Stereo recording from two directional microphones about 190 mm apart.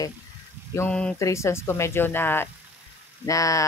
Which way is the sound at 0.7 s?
5° left (ahead or behind).